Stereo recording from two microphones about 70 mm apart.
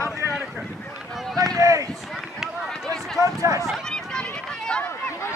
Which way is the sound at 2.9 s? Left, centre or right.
Centre.